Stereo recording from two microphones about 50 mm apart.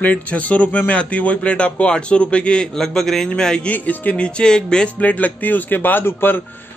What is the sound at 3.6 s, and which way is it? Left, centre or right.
Speech, left.